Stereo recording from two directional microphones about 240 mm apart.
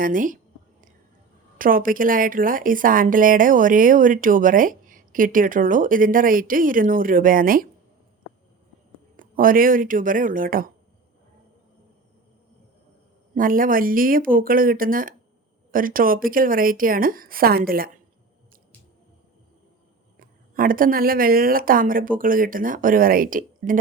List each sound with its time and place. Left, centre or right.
0.0 s a woman's voice: right
1.5 s a woman's voice: right
9.1 s a woman's voice: right
13.3 s a woman's voice: right
20.1 s a woman's voice: right